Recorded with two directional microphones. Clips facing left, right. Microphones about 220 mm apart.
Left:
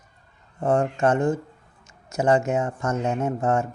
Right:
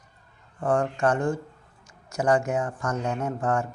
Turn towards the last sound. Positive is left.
turn(degrees=25)  # may be behind; listen again after turning